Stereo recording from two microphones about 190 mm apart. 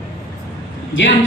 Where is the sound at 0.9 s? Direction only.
90° left.